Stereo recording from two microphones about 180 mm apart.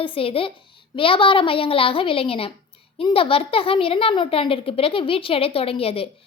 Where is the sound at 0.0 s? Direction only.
30° left (ahead or behind).